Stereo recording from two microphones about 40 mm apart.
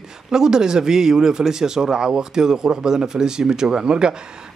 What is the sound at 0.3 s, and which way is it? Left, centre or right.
A man's voice, centre.